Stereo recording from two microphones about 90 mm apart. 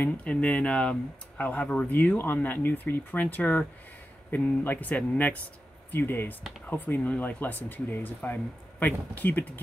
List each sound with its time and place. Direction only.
0.0 s speech: 15° left (ahead or behind)